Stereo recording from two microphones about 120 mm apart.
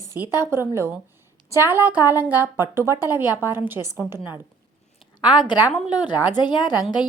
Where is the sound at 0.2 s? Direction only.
30° left (ahead or behind).